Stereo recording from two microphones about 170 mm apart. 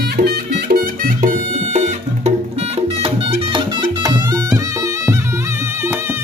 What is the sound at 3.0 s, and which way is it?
Music, 30° right (ahead or behind).